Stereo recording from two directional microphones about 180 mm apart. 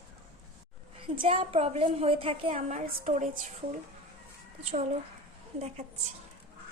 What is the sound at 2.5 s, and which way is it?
A woman's voice, 45° right (ahead or behind).